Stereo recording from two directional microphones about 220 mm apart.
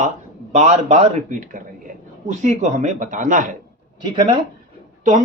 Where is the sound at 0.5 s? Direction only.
30° right (ahead or behind).